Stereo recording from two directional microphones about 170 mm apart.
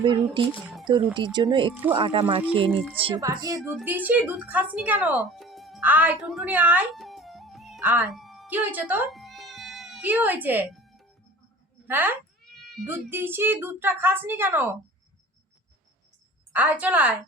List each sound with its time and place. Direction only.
0.0 s speech: 30° right (ahead or behind)
3.2 s speech: 20° right (ahead or behind)
3.8 s speech: 10° right (ahead or behind)
7.8 s speech: 10° right (ahead or behind)
8.1 s music: centre (ahead or behind)
8.5 s speech: 10° right (ahead or behind)
10.7 s music: centre (ahead or behind)
11.9 s speech: 10° right (ahead or behind)
16.5 s speech: 10° right (ahead or behind)